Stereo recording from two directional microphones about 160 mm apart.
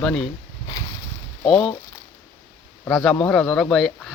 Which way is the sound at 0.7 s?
25° left (ahead or behind).